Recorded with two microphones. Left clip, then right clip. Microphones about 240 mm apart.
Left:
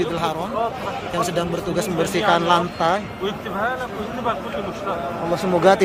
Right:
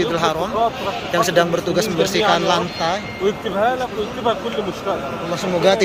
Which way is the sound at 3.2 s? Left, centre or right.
Right.